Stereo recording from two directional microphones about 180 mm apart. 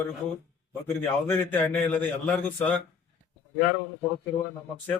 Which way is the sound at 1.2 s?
10° left (ahead or behind).